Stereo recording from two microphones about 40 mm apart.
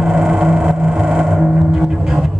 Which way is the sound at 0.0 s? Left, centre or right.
Right.